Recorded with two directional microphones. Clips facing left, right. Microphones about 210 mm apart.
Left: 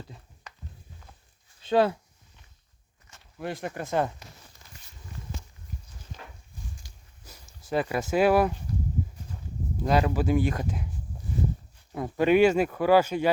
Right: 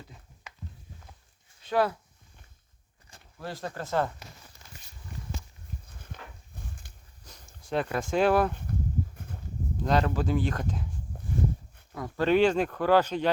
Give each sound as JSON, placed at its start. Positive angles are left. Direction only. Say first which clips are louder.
{"t": 1.6, "sound": "speech", "louder": "left 4 dB", "side_deg": 25}
{"t": 3.4, "sound": "speech", "louder": "left 3 dB", "side_deg": 15}
{"t": 6.8, "sound": "a sound", "louder": "left 1 dB", "side_deg": -55}
{"t": 7.3, "sound": "speech", "louder": "left 2 dB", "side_deg": 5}
{"t": 9.8, "sound": "speech", "louder": "left 2 dB", "side_deg": 10}
{"t": 11.9, "sound": "speech", "louder": "left 3 dB", "side_deg": 20}